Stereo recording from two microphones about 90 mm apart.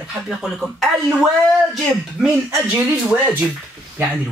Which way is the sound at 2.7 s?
20° right (ahead or behind).